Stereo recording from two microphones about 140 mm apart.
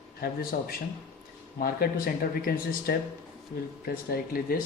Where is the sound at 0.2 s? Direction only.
90° left.